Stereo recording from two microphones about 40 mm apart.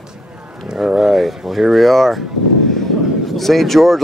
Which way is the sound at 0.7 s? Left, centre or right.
Centre.